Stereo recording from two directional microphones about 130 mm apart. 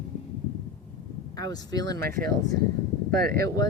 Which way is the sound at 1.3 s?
30° left (ahead or behind).